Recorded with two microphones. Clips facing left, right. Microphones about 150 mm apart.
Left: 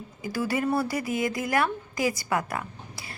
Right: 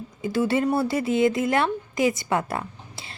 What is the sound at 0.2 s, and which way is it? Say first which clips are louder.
Speech: right 5 dB; 25° right (ahead or behind).